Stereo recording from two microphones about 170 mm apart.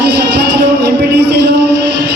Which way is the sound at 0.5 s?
85° right.